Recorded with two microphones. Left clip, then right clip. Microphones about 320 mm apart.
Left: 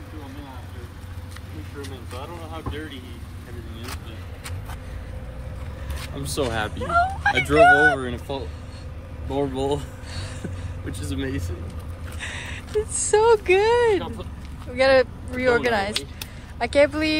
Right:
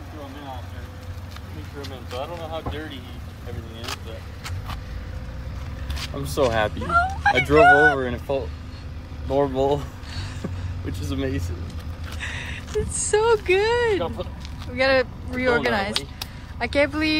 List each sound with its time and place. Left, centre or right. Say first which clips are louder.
1.8 s speech: right 5 dB; right
6.1 s speech: right 4 dB; centre
10.9 s speech: right 1 dB; centre
12.2 s speech: right 1 dB; centre